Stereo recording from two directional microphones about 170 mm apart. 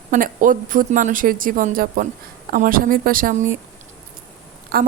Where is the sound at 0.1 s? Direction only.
50° right (ahead or behind).